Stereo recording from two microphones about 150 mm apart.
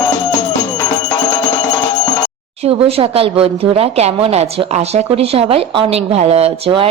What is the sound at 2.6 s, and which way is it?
A woman's voice, 40° right (ahead or behind).